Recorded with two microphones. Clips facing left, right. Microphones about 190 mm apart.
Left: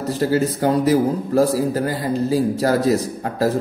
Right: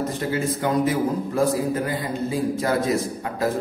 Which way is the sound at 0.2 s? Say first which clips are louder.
Left 9 dB; 40° left (ahead or behind).